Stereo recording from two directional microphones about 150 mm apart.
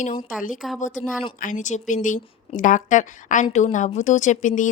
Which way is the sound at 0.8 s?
55° left (ahead or behind).